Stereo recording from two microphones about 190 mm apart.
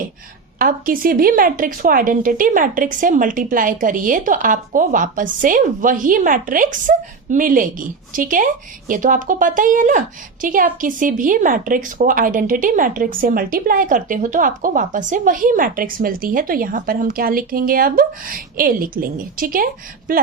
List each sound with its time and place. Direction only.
0.6 s a woman's voice: 50° right (ahead or behind)